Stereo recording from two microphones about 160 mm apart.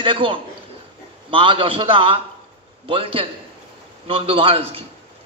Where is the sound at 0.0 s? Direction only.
35° right (ahead or behind).